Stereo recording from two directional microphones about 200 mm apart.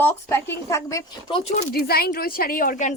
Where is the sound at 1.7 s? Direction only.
50° left (ahead or behind).